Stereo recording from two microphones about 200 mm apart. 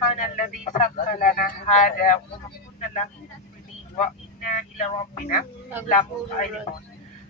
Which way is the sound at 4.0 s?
35° left (ahead or behind).